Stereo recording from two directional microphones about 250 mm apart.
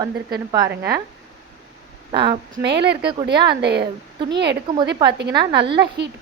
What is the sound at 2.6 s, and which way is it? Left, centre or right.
A woman's voice, right.